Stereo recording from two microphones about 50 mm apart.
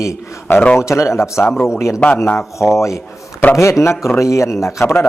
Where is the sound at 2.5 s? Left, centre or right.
Left.